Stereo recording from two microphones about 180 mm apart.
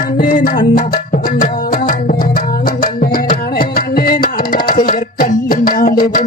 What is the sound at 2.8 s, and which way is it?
Music, 50° left (ahead or behind).